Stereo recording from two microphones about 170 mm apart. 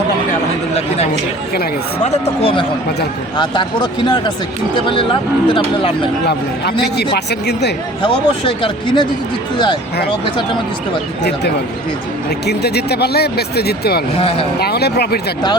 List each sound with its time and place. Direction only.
2.0 s speech: 35° left (ahead or behind)
6.9 s speech: 75° left (ahead or behind)
8.0 s speech: 30° left (ahead or behind)
11.2 s speech: 75° left (ahead or behind)
14.2 s speech: 35° left (ahead or behind)
14.6 s speech: 70° left (ahead or behind)